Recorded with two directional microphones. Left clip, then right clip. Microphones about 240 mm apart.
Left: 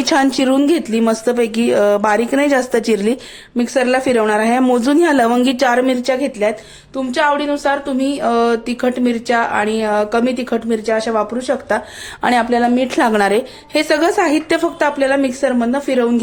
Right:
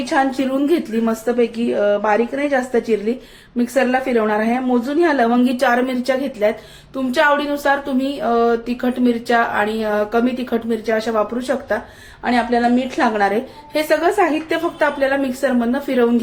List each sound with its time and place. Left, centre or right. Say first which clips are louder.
0.0 s a woman's voice: left 4 dB; left
6.9 s speech: even; centre
12.2 s a woman's voice: left 3 dB; left